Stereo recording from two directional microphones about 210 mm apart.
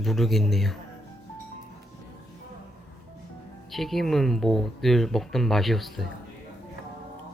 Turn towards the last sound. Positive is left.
turn(degrees=0)  # may be behind; listen again after turning